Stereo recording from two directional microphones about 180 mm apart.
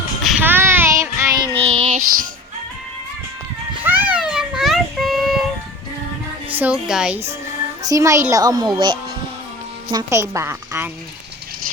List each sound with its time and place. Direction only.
0.2 s child singing: 5° right (ahead or behind)
1.5 s child singing: 35° right (ahead or behind)
3.8 s a sound: 10° right (ahead or behind)
6.6 s a woman's voice: 5° right (ahead or behind)
7.8 s a child's voice: 20° right (ahead or behind)